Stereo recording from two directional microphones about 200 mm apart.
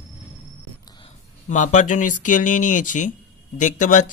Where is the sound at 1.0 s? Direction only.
40° left (ahead or behind).